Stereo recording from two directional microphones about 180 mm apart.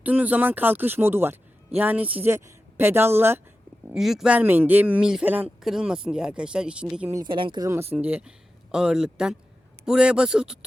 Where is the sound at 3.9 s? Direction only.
Centre (ahead or behind).